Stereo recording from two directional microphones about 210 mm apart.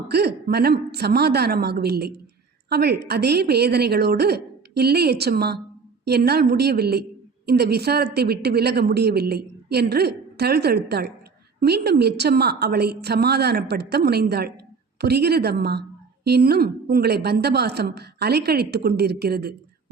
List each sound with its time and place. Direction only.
0.1 s a woman's voice: 50° right (ahead or behind)